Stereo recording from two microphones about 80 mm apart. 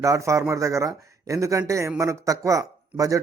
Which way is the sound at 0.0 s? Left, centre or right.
Right.